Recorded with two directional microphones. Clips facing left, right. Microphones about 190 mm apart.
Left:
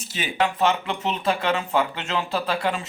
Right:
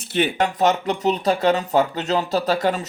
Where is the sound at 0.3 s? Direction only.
40° right (ahead or behind).